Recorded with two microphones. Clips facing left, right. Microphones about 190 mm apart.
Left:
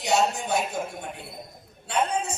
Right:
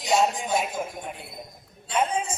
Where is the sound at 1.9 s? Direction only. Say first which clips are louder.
Even; 65° left (ahead or behind).